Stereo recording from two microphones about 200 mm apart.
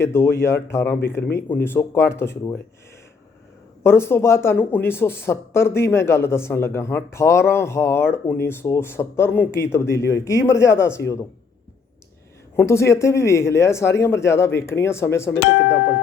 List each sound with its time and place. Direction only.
0.0 s speech: 15° left (ahead or behind)
3.8 s speech: 10° left (ahead or behind)
12.5 s speech: 15° left (ahead or behind)
15.4 s speech: 60° left (ahead or behind)